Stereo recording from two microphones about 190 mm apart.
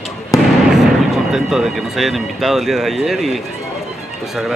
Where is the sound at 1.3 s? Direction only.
Centre (ahead or behind).